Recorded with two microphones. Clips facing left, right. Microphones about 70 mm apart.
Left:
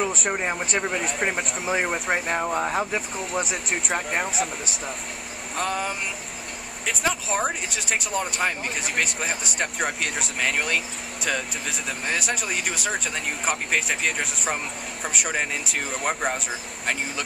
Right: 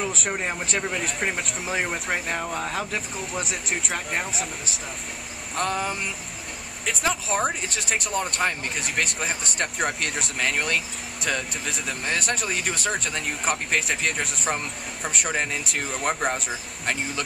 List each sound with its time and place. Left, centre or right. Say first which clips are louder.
0.1 s speech: left 2 dB; centre
2.4 s speech: left 4 dB; centre
3.2 s speech: left 3 dB; centre
5.6 s speech: right 1 dB; centre